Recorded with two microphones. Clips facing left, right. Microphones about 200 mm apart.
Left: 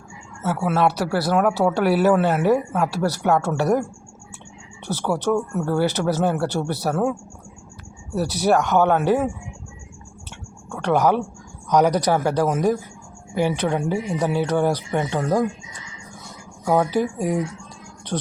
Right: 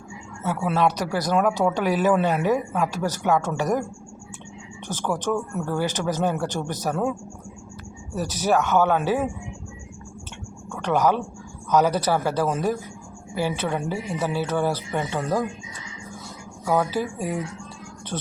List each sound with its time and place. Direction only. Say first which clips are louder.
1.1 s speech: left 2 dB; 10° left (ahead or behind)
2.2 s speech: left 3 dB; 15° right (ahead or behind)
2.5 s speech: left 3 dB; 10° left (ahead or behind)
4.9 s speech: left 4 dB; 10° left (ahead or behind)
8.1 s speech: left 3 dB; 10° left (ahead or behind)
10.7 s speech: left 2 dB; 10° left (ahead or behind)
16.6 s speech: left 4 dB; 15° left (ahead or behind)
18.1 s music: left 5 dB; centre (ahead or behind)